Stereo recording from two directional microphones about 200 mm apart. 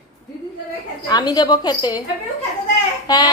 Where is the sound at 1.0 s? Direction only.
20° left (ahead or behind).